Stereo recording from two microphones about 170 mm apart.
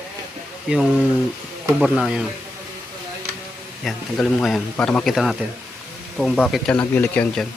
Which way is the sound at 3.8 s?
Centre (ahead or behind).